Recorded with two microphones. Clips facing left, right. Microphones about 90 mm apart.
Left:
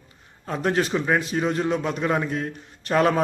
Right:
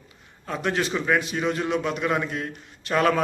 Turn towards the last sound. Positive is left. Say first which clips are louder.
# left 1 dB
turn(degrees=30)  # may be behind; listen again after turning